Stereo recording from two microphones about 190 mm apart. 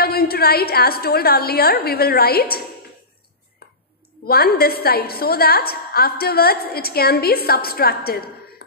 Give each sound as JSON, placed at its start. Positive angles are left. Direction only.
{"t": 0.0, "sound": "a woman's voice", "side_deg": 55}
{"t": 4.3, "sound": "a woman's voice", "side_deg": 55}